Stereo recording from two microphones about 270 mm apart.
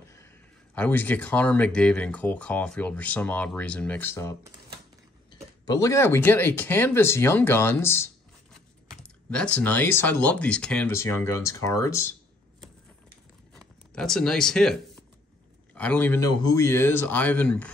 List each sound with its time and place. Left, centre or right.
0.7 s speech: centre
13.6 s speech: centre